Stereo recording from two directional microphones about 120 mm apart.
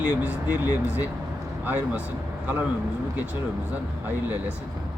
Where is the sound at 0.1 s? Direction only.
15° right (ahead or behind).